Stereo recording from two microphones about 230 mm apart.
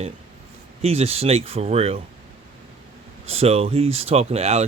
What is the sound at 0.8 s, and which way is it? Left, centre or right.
Speech, right.